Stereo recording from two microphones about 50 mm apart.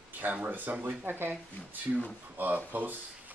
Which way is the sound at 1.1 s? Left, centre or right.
Right.